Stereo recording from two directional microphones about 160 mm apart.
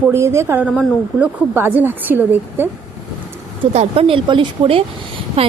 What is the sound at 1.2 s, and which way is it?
A woman's voice, 10° right (ahead or behind).